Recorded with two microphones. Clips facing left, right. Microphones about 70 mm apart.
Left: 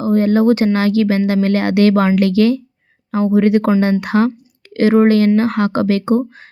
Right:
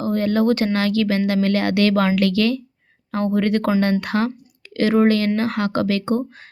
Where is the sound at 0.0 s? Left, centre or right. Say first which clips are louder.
Left 6 dB; left.